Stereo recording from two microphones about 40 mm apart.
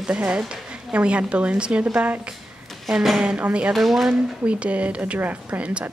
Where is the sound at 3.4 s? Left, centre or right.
Right.